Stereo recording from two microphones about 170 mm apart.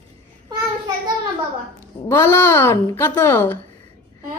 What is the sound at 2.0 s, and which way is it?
Child singing, 15° left (ahead or behind).